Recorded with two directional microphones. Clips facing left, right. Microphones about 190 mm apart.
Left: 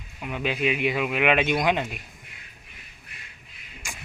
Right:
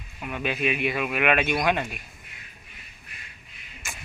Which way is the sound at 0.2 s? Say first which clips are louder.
Left 1 dB; 15° left (ahead or behind).